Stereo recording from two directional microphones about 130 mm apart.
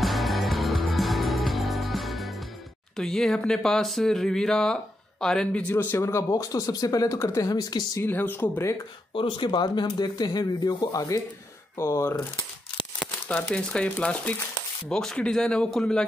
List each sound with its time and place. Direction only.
0.0 s music: centre (ahead or behind)
3.0 s speech: 5° left (ahead or behind); by 8.0 s 30° left (ahead or behind)
8.0 s speech: 15° left (ahead or behind)
9.1 s speech: 40° left (ahead or behind); by 12.3 s 20° left (ahead or behind)
13.0 s speech: 5° left (ahead or behind)